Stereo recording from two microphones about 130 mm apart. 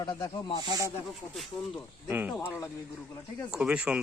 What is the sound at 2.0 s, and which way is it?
Speech, 15° right (ahead or behind).